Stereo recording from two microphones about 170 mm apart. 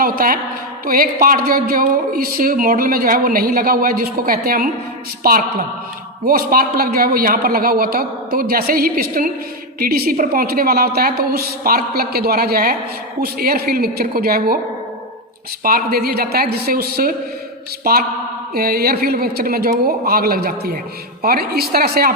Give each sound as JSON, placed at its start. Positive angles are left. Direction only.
{"t": 0.0, "sound": "a sound", "side_deg": -60}
{"t": 0.9, "sound": "speech", "side_deg": -55}
{"t": 15.6, "sound": "speech", "side_deg": -60}